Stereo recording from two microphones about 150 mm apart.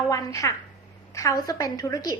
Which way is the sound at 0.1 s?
20° left (ahead or behind).